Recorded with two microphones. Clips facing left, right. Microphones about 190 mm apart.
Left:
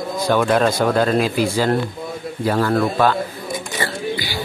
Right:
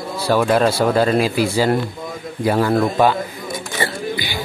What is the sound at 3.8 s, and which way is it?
Music, 20° right (ahead or behind).